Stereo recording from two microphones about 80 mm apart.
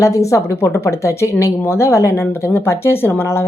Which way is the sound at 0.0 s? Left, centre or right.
Left.